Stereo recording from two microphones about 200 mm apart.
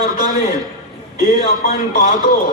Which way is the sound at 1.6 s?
45° left (ahead or behind).